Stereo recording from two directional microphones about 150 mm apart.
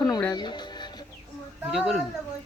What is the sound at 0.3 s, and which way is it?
Music, 30° left (ahead or behind).